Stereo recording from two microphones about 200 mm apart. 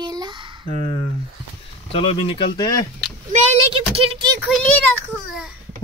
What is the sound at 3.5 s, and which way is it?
Speech, 30° right (ahead or behind).